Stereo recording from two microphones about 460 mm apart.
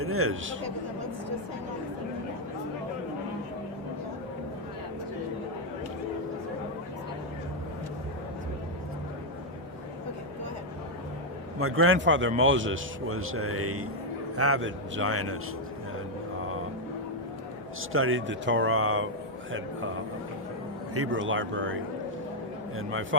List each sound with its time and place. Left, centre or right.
0.0 s a man's voice: right
11.6 s a man's voice: right
17.9 s a man's voice: right
20.9 s a man's voice: right
22.8 s a man's voice: right